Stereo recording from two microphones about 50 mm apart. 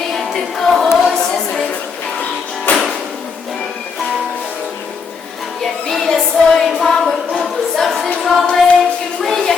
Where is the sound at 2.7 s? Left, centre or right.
Left.